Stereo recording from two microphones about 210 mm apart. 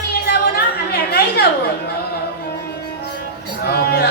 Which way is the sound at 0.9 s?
50° left (ahead or behind).